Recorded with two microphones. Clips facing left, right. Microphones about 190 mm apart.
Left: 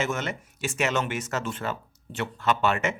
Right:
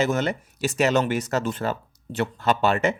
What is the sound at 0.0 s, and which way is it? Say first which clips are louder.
Speech: right 6 dB; 35° right (ahead or behind).